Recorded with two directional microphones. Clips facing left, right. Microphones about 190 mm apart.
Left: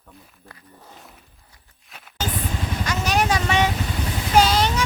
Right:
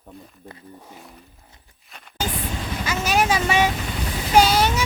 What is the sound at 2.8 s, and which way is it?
Vehicle, 5° right (ahead or behind).